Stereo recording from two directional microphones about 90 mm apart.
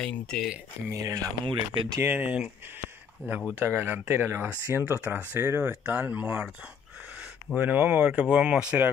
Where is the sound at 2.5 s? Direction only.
25° right (ahead or behind).